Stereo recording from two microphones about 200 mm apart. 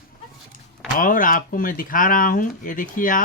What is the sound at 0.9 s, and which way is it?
Speech, 45° left (ahead or behind).